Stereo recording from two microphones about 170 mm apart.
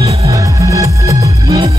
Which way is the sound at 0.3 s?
20° right (ahead or behind).